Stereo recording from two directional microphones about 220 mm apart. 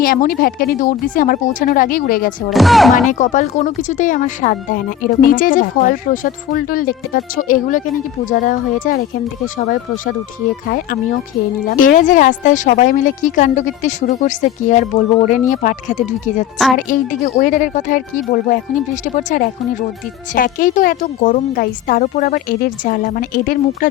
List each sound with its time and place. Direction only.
0.0 s speech: 40° left (ahead or behind)
2.5 s speech: centre (ahead or behind)
3.1 s speech: 35° left (ahead or behind)
11.8 s speech: 35° left (ahead or behind)